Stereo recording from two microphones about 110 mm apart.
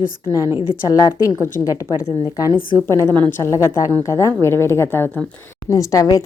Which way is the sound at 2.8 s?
30° right (ahead or behind).